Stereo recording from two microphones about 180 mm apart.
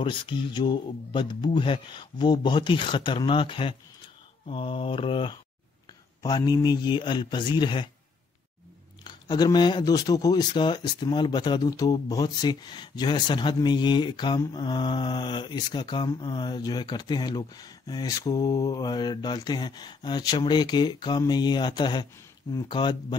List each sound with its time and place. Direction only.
0.0 s speech: 25° left (ahead or behind)
9.0 s speech: 25° left (ahead or behind)